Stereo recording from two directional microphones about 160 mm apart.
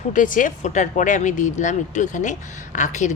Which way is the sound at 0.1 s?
55° left (ahead or behind).